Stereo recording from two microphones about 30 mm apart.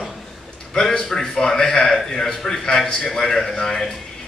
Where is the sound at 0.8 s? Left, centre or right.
Centre.